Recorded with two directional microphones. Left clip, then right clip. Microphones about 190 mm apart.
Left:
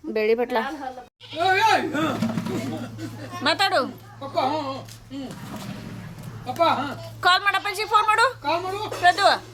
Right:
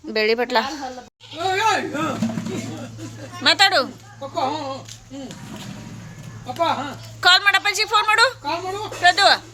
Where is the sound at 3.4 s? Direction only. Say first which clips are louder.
Right 5 dB; 5° right (ahead or behind).